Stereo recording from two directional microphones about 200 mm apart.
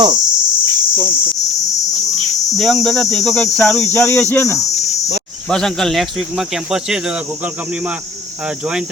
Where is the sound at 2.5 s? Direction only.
Centre (ahead or behind).